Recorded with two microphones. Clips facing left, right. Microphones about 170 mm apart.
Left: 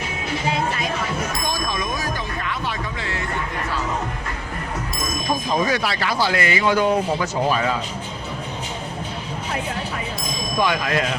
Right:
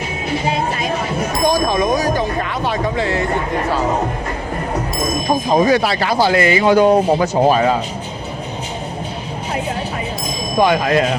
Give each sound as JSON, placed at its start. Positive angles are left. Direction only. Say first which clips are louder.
{"t": 0.4, "sound": "bicycle bell", "louder": "right 2 dB", "side_deg": -25}
{"t": 2.7, "sound": "music", "louder": "right 10 dB", "side_deg": -35}
{"t": 5.6, "sound": "speech", "louder": "right 7 dB", "side_deg": -35}
{"t": 10.6, "sound": "speech", "louder": "right 7 dB", "side_deg": -25}